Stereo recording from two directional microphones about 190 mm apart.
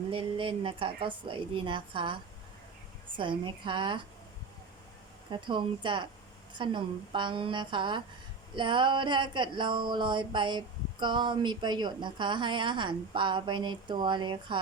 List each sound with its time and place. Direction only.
0.1 s a woman's voice: 30° right (ahead or behind)
3.2 s a woman's voice: 25° right (ahead or behind)
5.3 s a woman's voice: 25° right (ahead or behind)